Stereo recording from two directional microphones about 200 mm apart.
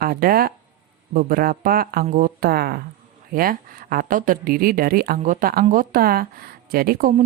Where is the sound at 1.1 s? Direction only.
45° right (ahead or behind).